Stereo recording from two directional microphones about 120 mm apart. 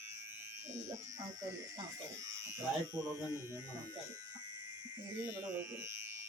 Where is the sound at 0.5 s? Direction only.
25° right (ahead or behind).